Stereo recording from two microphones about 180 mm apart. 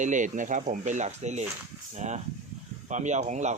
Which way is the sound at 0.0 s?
45° right (ahead or behind).